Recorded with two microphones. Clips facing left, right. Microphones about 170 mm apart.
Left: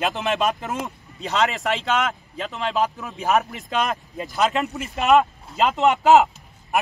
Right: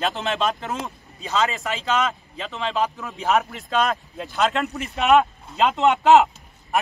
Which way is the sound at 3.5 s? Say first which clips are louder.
Right 2 dB; 15° left (ahead or behind).